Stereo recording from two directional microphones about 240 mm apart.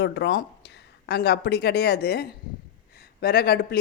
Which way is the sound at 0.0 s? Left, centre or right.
Left.